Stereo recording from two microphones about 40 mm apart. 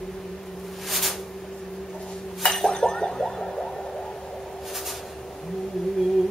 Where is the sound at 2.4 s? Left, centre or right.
Centre.